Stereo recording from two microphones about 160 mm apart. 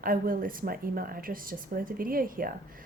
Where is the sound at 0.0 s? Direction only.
60° right (ahead or behind).